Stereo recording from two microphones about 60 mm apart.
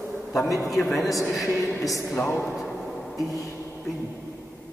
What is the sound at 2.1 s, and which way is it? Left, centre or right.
Speech, left.